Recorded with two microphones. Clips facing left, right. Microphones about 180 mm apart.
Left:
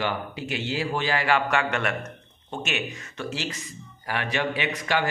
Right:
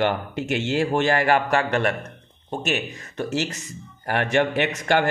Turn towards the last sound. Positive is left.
turn(degrees=-55)  # may be behind; listen again after turning